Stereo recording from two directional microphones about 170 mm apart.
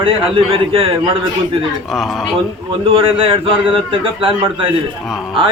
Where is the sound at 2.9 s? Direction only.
30° right (ahead or behind).